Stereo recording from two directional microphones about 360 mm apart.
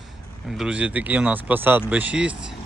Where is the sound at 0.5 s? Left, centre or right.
Centre.